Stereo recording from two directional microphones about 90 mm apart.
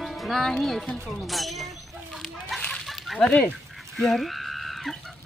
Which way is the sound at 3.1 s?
15° left (ahead or behind).